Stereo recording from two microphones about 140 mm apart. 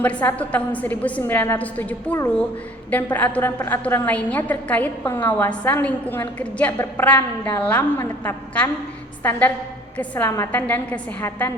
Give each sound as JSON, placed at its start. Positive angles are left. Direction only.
{"t": 0.0, "sound": "a woman's voice", "side_deg": 10}
{"t": 10.0, "sound": "a woman's voice", "side_deg": 15}